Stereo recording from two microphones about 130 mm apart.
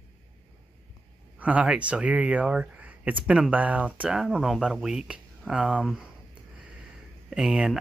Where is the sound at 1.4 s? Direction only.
10° right (ahead or behind).